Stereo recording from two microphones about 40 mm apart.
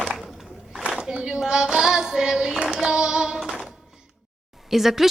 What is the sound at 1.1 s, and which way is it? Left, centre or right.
Speech, centre.